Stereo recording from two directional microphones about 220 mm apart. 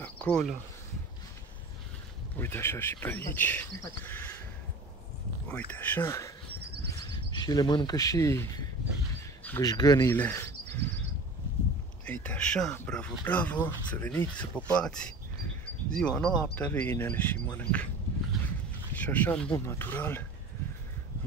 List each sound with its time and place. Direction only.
0.0 s insect: 5° left (ahead or behind)
2.3 s speech: 10° left (ahead or behind)
5.5 s speech: 5° left (ahead or behind)
6.6 s a sound: 45° right (ahead or behind)
7.2 s speech: 20° left (ahead or behind)
12.1 s speech: 5° left (ahead or behind)
18.9 s speech: 10° left (ahead or behind)